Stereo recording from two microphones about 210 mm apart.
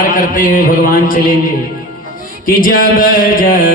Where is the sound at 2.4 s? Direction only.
40° left (ahead or behind).